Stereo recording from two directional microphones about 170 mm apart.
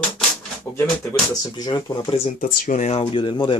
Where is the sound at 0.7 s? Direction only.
15° left (ahead or behind).